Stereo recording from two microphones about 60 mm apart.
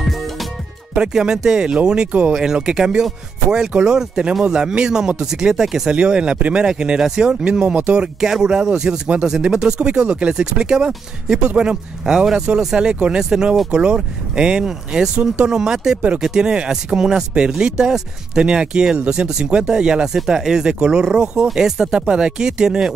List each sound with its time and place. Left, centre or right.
0.9 s speech: centre
6.6 s speech: centre